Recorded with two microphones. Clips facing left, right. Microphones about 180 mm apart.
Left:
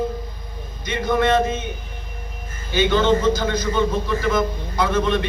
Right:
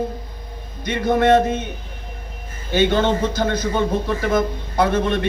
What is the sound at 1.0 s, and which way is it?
Speech, 60° right (ahead or behind).